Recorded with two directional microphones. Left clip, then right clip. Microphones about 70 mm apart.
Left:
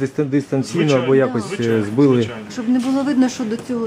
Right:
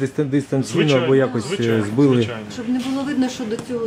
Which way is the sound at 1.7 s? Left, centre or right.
Centre.